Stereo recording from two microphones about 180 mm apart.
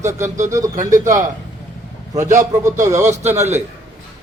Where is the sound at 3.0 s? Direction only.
40° right (ahead or behind).